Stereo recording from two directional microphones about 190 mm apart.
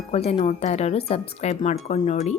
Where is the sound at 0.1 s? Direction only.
30° left (ahead or behind).